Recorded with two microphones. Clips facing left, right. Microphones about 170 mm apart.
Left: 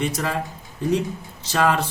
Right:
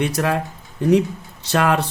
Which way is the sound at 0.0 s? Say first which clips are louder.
Right 4 dB; 65° right (ahead or behind).